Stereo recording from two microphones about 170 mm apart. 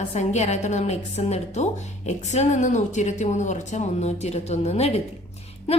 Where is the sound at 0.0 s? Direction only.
45° left (ahead or behind).